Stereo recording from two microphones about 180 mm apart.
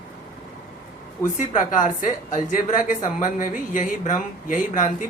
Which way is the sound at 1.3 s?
45° left (ahead or behind).